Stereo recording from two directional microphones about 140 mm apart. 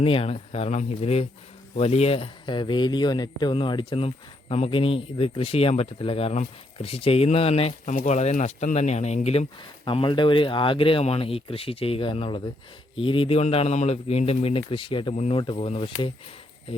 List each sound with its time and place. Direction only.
0.0 s speech: 40° left (ahead or behind)
9.8 s speech: 35° left (ahead or behind)
15.1 s speech: 50° left (ahead or behind)
15.4 s speech: 40° left (ahead or behind)